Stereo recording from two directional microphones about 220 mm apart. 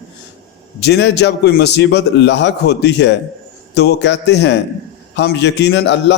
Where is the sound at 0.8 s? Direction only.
50° left (ahead or behind).